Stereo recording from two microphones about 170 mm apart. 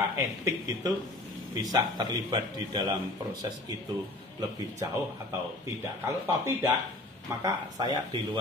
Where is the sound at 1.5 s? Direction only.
20° right (ahead or behind).